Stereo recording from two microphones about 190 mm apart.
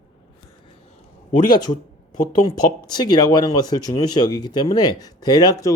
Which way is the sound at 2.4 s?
20° left (ahead or behind).